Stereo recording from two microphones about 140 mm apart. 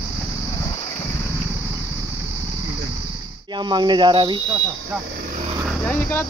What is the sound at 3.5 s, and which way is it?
Speech, 30° right (ahead or behind).